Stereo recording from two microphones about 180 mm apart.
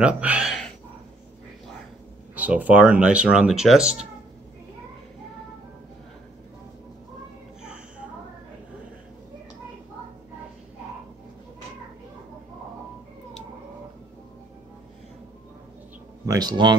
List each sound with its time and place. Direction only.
0.0 s speech: 5° right (ahead or behind)
2.3 s speech: 10° right (ahead or behind)
16.3 s speech: 20° right (ahead or behind)